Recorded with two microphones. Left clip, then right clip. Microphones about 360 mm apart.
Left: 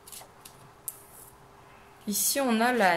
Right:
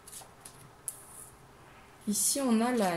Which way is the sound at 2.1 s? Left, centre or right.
Left.